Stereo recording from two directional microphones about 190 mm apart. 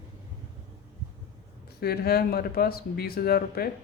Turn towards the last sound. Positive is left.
turn(degrees=55)  # may be behind; listen again after turning